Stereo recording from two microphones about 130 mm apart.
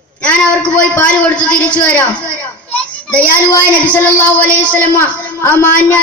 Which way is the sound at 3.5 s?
15° left (ahead or behind).